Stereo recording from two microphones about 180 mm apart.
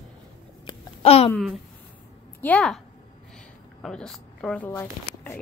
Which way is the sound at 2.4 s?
5° left (ahead or behind).